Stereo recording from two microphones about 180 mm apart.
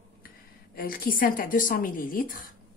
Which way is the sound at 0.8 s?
50° left (ahead or behind).